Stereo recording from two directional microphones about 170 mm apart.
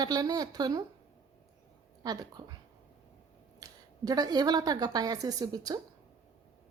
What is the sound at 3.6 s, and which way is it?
A woman's voice, 20° right (ahead or behind).